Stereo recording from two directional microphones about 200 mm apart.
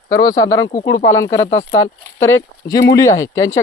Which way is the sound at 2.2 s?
15° left (ahead or behind).